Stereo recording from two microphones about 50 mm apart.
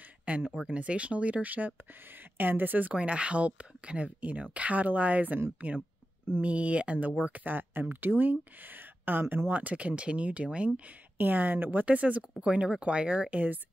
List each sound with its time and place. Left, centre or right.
0.2 s speech: right
6.4 s speech: right
7.4 s speech: right
9.2 s speech: right
9.5 s speech: right
11.1 s speech: right
11.8 s speech: right